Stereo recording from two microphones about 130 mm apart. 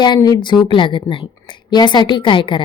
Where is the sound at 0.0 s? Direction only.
30° left (ahead or behind).